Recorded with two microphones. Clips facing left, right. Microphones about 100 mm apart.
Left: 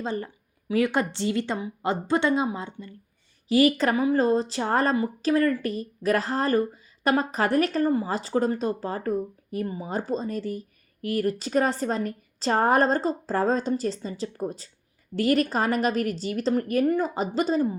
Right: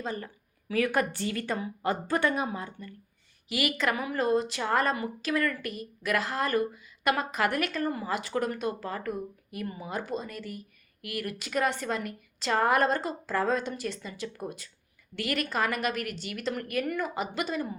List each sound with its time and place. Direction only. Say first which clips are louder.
0.0 s a woman's voice: left 5 dB; 30° left (ahead or behind)
3.5 s a woman's voice: left 9 dB; 35° left (ahead or behind)